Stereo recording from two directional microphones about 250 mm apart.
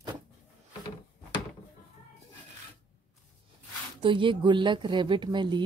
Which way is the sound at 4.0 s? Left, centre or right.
Centre.